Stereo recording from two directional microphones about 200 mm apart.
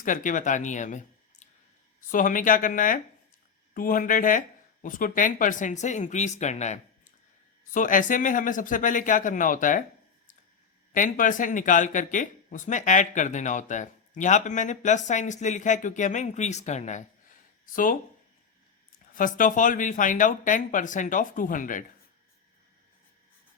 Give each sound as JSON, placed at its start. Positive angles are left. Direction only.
{"t": 0.0, "sound": "speech", "side_deg": 40}
{"t": 10.9, "sound": "speech", "side_deg": 40}
{"t": 19.1, "sound": "speech", "side_deg": 40}